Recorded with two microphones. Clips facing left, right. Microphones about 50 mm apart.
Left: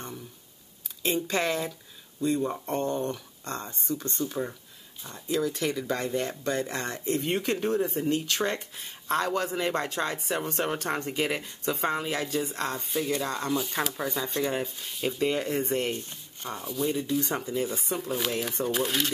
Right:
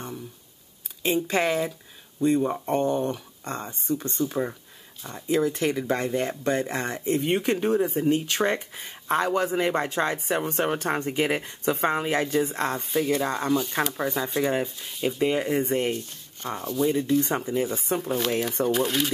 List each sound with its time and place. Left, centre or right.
1.0 s speech: centre
9.1 s speech: centre
12.8 s speech: centre
13.5 s speech: centre
14.3 s speech: centre
14.8 s speech: centre
15.1 s speech: centre
16.4 s speech: centre
17.2 s speech: right
17.9 s speech: right
18.7 s speech: centre